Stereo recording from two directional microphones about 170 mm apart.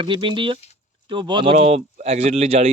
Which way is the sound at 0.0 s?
30° right (ahead or behind).